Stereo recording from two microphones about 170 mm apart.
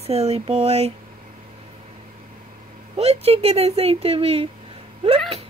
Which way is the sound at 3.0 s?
35° right (ahead or behind).